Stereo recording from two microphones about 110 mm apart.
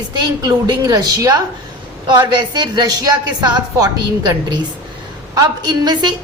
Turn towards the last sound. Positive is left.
turn(degrees=-40)  # may be behind; listen again after turning